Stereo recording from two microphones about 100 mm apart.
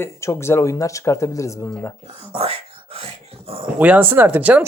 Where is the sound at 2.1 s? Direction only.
80° right.